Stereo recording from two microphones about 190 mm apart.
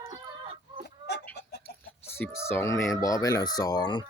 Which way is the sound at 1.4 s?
60° left (ahead or behind).